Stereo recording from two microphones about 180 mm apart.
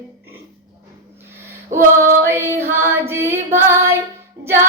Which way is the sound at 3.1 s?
15° right (ahead or behind).